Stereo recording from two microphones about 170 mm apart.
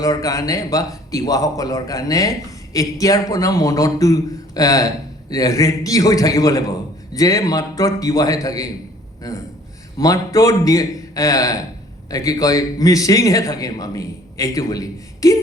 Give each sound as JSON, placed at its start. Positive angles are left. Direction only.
{"t": 0.0, "sound": "a man's voice", "side_deg": 20}